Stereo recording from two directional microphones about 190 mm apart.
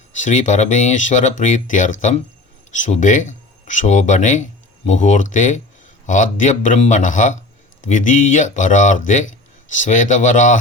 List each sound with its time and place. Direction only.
0.2 s speech: 40° left (ahead or behind)